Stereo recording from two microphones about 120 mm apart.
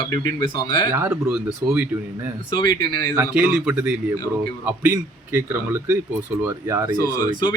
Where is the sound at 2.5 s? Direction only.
35° left (ahead or behind).